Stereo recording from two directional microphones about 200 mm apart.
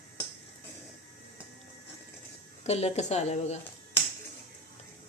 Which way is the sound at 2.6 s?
35° left (ahead or behind).